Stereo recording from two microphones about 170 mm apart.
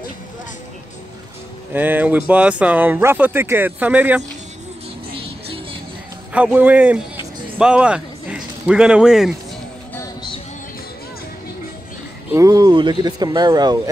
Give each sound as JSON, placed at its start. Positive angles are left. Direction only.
{"t": 1.7, "sound": "speech", "side_deg": -10}
{"t": 5.1, "sound": "music", "side_deg": -35}
{"t": 6.3, "sound": "speech", "side_deg": -10}
{"t": 12.3, "sound": "speech", "side_deg": -20}